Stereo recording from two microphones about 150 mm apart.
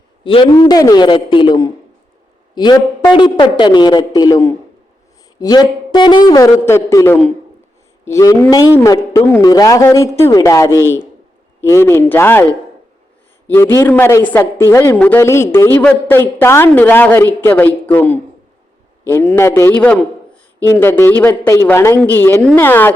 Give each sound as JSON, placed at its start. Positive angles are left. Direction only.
{"t": 0.5, "sound": "a man's voice", "side_deg": 25}
{"t": 13.5, "sound": "a woman's voice", "side_deg": 15}